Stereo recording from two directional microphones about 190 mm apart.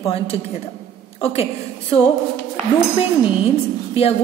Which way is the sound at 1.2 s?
30° left (ahead or behind).